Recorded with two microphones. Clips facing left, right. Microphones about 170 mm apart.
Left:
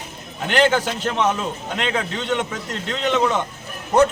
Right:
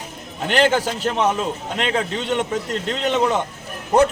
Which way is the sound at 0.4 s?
35° right (ahead or behind).